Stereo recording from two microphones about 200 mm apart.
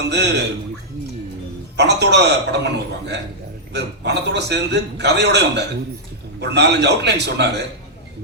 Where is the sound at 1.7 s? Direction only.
60° right (ahead or behind).